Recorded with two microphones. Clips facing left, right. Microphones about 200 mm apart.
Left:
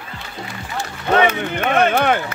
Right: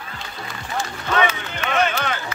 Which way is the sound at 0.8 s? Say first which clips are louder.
Left 5 dB; 60° left (ahead or behind).